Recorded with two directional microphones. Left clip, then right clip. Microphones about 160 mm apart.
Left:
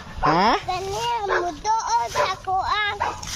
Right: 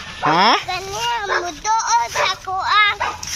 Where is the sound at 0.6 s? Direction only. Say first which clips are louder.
Right 3 dB; 15° left (ahead or behind).